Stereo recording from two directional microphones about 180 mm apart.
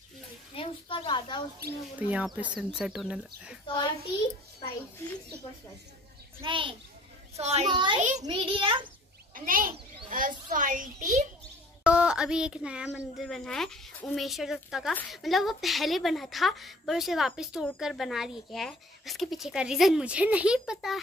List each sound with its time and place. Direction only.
0.6 s a woman's voice: 30° left (ahead or behind)
2.0 s speech: 10° right (ahead or behind)
3.6 s a woman's voice: 25° left (ahead or behind)
6.4 s a child's voice: 30° right (ahead or behind)
9.3 s a child's voice: 50° right (ahead or behind)
11.8 s speech: 5° right (ahead or behind)